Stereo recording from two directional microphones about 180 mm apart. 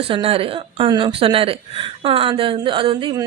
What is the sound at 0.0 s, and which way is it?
A woman's voice, 30° right (ahead or behind).